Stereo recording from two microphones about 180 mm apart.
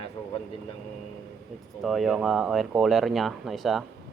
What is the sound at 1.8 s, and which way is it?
Speech, centre (ahead or behind).